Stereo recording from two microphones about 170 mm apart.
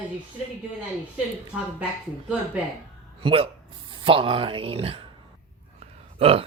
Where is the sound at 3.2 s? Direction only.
35° right (ahead or behind).